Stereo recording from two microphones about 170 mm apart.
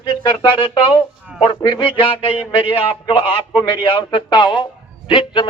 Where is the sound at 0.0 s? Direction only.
30° left (ahead or behind).